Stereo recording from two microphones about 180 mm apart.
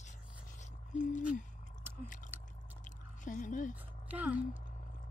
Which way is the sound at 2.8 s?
45° left (ahead or behind).